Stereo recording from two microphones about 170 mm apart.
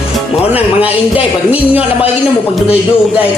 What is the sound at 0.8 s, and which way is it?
A man's voice, 10° right (ahead or behind).